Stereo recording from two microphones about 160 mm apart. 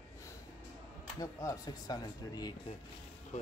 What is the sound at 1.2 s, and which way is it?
Speech, 20° left (ahead or behind).